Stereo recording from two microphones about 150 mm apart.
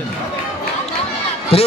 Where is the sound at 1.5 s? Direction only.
40° left (ahead or behind).